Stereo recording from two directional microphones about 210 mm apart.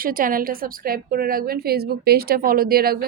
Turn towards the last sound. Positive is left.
turn(degrees=-45)  # may be behind; listen again after turning